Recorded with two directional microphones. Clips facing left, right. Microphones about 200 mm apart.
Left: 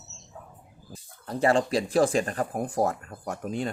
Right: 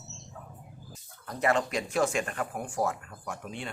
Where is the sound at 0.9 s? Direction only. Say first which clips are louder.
Left 8 dB; 30° left (ahead or behind).